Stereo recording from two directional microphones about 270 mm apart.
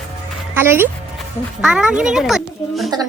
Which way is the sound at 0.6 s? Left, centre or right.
Centre.